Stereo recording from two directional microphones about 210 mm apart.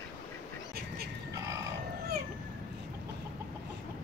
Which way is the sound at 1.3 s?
15° right (ahead or behind).